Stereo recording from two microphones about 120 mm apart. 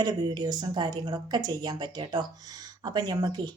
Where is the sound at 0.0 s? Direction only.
35° right (ahead or behind).